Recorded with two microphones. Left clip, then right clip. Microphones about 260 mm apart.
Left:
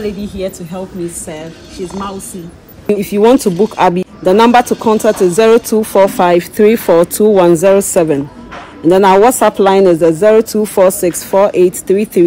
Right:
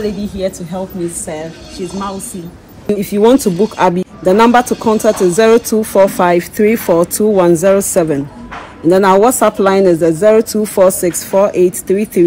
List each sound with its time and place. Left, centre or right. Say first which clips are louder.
0.7 s a woman's voice: right 1 dB; centre
3.0 s a woman's voice: left 1 dB; left